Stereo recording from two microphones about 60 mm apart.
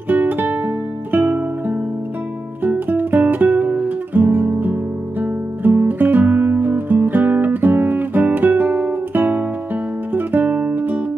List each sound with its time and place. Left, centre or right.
0.1 s music: right
4.1 s guitar: right
5.2 s music: right